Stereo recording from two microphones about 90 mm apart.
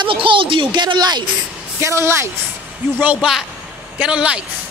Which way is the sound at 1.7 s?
30° right (ahead or behind).